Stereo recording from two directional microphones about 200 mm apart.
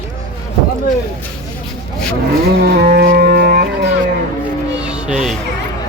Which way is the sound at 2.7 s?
55° right (ahead or behind).